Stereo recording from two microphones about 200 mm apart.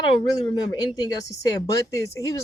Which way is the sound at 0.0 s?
20° left (ahead or behind).